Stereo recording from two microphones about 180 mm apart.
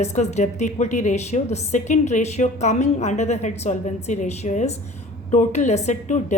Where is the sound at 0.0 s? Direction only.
40° left (ahead or behind).